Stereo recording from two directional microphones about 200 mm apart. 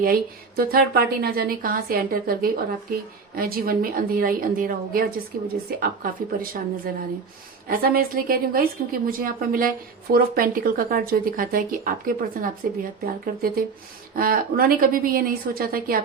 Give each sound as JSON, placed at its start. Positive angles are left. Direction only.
{"t": 0.0, "sound": "a woman's voice", "side_deg": -50}
{"t": 7.7, "sound": "a woman's voice", "side_deg": -45}